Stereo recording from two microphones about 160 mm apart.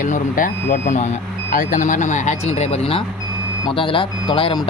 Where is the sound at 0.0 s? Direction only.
55° left (ahead or behind).